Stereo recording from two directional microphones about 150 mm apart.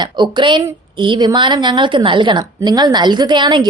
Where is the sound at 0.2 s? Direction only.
30° right (ahead or behind).